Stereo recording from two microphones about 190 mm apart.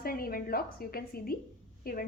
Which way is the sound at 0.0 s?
50° left (ahead or behind).